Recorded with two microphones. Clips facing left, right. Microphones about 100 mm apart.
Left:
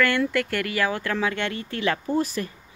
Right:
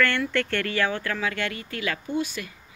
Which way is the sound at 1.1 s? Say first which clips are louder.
Left 3 dB; 25° left (ahead or behind).